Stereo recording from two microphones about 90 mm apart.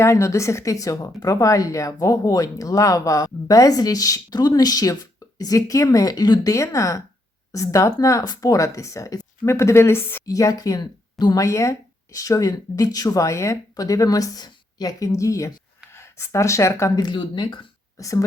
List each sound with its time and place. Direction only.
0.0 s a woman's voice: 35° left (ahead or behind); by 6.5 s 50° left (ahead or behind)
6.5 s a woman's voice: 35° left (ahead or behind)
10.2 s speech: 40° left (ahead or behind)
11.4 s speech: 35° left (ahead or behind)
16.9 s a woman's voice: 50° left (ahead or behind)
17.2 s speech: 60° left (ahead or behind)
17.9 s speech: 40° left (ahead or behind)